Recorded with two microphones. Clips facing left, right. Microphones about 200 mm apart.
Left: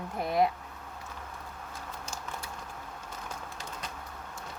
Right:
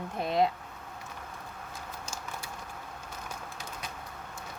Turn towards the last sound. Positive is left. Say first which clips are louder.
# even
turn(degrees=-10)  # may be behind; listen again after turning